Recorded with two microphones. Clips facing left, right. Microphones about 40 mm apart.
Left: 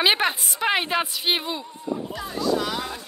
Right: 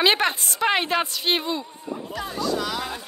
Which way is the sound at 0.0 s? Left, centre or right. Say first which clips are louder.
Right 1 dB; centre.